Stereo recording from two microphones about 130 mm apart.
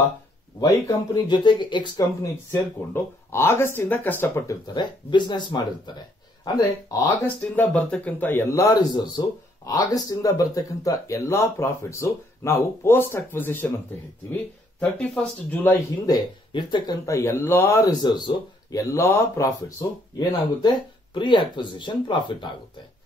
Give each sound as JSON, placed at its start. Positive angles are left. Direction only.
{"t": 0.6, "sound": "speech", "side_deg": 30}
{"t": 2.5, "sound": "speech", "side_deg": 20}
{"t": 4.7, "sound": "speech", "side_deg": 35}
{"t": 7.5, "sound": "speech", "side_deg": 10}
{"t": 14.8, "sound": "speech", "side_deg": 10}
{"t": 16.1, "sound": "speech", "side_deg": 35}
{"t": 17.0, "sound": "speech", "side_deg": 20}
{"t": 20.2, "sound": "speech", "side_deg": 35}